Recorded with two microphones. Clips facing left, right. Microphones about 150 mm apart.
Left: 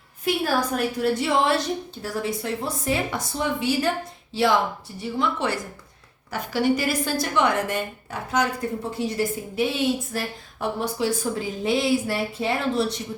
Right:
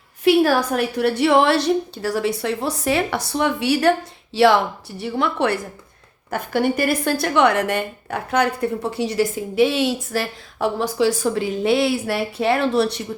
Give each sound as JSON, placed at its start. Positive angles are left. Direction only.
{"t": 0.3, "sound": "a woman's voice", "side_deg": -70}
{"t": 6.3, "sound": "a woman's voice", "side_deg": -55}